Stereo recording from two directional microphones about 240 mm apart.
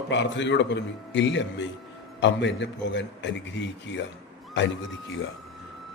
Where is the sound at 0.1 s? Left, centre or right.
Left.